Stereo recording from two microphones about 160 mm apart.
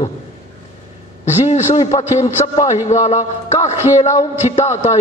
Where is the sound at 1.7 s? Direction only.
25° left (ahead or behind).